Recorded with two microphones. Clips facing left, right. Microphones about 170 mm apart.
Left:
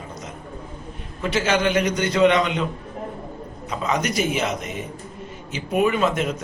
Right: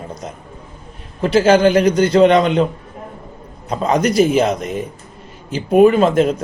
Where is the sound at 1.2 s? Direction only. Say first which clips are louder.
Right 9 dB; 35° right (ahead or behind).